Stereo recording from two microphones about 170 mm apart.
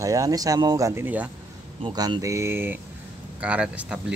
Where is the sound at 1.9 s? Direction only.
20° right (ahead or behind).